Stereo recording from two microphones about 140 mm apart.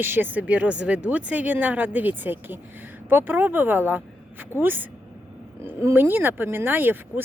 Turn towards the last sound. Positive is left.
turn(degrees=-15)  # may be behind; listen again after turning